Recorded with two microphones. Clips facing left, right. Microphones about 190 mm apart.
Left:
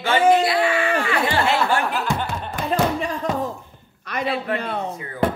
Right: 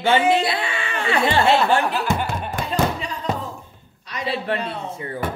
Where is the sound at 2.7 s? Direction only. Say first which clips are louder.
Left 3 dB; 50° left (ahead or behind).